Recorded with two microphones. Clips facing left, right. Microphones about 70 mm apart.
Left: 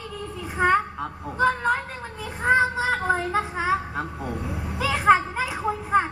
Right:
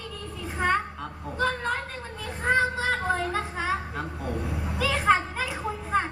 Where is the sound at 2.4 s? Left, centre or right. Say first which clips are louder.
Left 4 dB; centre.